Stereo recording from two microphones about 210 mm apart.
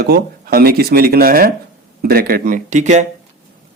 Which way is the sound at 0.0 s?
45° right (ahead or behind).